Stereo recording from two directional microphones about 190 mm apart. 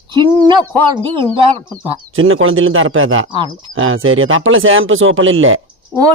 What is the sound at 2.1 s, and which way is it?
Speech, 90° right.